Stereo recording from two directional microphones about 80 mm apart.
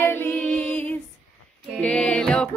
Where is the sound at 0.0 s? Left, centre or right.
Left.